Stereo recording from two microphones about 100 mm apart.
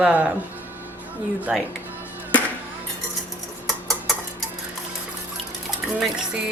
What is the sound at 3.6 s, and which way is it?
Rodents, centre (ahead or behind).